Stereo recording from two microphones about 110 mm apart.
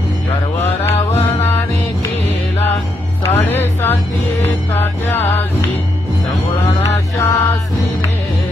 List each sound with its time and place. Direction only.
3.3 s music: 20° left (ahead or behind)
6.6 s music: 25° left (ahead or behind)